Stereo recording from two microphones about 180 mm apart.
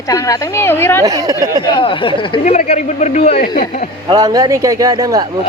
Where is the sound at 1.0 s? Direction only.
20° right (ahead or behind).